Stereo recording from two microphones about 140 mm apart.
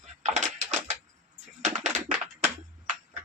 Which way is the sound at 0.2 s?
60° right (ahead or behind).